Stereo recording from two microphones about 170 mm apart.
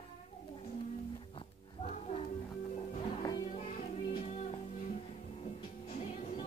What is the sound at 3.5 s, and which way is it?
Music, 45° left (ahead or behind).